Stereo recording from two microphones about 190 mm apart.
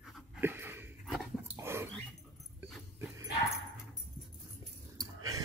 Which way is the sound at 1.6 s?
10° right (ahead or behind).